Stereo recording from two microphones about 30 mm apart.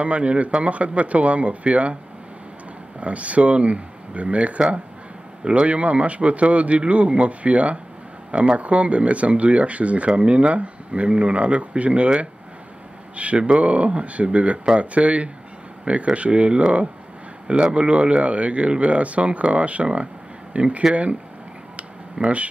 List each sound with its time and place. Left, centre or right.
0.0 s speech: right
3.0 s speech: right
13.1 s speech: right
17.7 s speech: right
22.2 s speech: right